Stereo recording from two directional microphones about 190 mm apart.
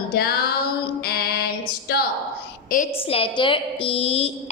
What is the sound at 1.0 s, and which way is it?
Female singing, 55° left (ahead or behind).